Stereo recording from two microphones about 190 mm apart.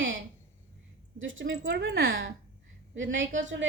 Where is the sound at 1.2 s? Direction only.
90° right; by 2.2 s 55° right (ahead or behind).